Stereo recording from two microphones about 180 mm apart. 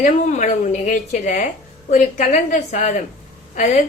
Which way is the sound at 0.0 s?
45° left (ahead or behind).